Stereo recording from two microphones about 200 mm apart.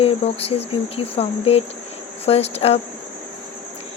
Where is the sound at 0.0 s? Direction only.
30° left (ahead or behind).